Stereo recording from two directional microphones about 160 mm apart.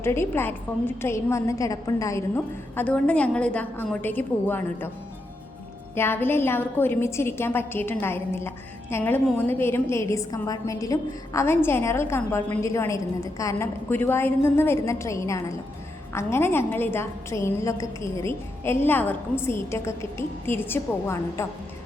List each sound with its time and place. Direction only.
0.0 s a woman's voice: 15° left (ahead or behind)
5.9 s a woman's voice: 15° left (ahead or behind)